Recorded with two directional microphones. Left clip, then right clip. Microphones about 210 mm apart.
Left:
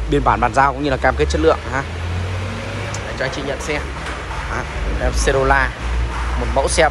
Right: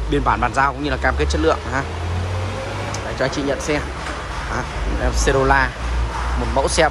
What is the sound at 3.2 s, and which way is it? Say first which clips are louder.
Speech: right 2 dB; 30° right (ahead or behind).